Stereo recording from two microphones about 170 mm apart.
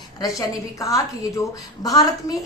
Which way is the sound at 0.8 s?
20° left (ahead or behind).